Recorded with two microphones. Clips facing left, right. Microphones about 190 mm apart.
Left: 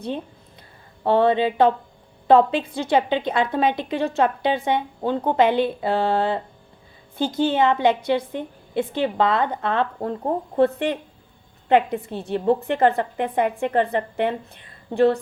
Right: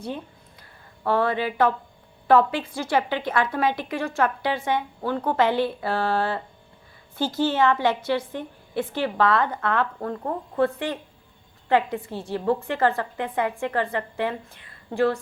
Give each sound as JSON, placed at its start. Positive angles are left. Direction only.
{"t": 1.0, "sound": "a woman's voice", "side_deg": 25}